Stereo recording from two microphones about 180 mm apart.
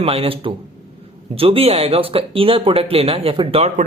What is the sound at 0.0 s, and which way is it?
Speech, 30° right (ahead or behind).